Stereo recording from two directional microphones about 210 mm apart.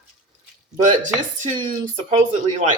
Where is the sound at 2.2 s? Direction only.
35° right (ahead or behind).